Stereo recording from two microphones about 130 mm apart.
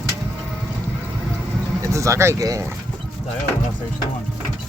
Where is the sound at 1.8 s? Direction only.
25° right (ahead or behind).